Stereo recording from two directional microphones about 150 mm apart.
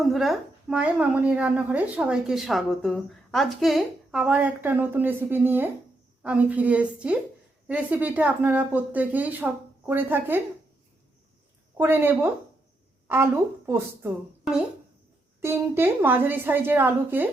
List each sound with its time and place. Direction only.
0.0 s a woman's voice: centre (ahead or behind)
11.8 s a woman's voice: 15° right (ahead or behind)
15.4 s a woman's voice: 15° right (ahead or behind)